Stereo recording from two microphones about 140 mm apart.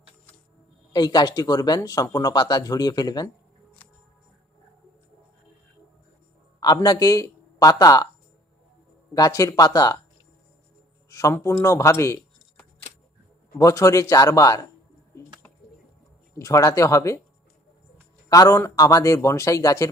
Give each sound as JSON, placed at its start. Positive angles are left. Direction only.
{"t": 0.9, "sound": "speech", "side_deg": 30}
{"t": 6.6, "sound": "speech", "side_deg": 30}
{"t": 9.1, "sound": "speech", "side_deg": 25}
{"t": 11.1, "sound": "a sound", "side_deg": 25}
{"t": 11.3, "sound": "speech", "side_deg": 20}
{"t": 13.6, "sound": "speech", "side_deg": 25}
{"t": 16.3, "sound": "speech", "side_deg": 25}
{"t": 18.3, "sound": "speech", "side_deg": 25}